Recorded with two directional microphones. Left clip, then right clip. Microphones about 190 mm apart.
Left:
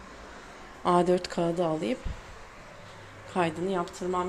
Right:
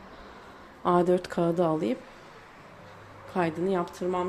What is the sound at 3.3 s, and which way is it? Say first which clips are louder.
Speech: right 1 dB; 10° right (ahead or behind).